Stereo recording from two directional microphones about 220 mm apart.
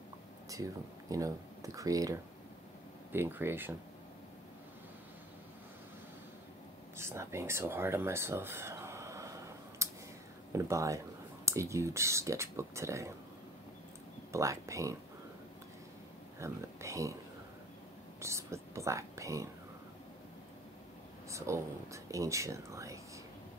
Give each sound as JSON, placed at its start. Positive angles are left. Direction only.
{"t": 1.1, "sound": "speech", "side_deg": -15}
{"t": 7.0, "sound": "a sound", "side_deg": -10}
{"t": 10.5, "sound": "speech", "side_deg": -15}
{"t": 14.3, "sound": "speech", "side_deg": -15}
{"t": 16.3, "sound": "speech", "side_deg": -15}
{"t": 18.2, "sound": "speech", "side_deg": -15}
{"t": 21.3, "sound": "speech", "side_deg": -15}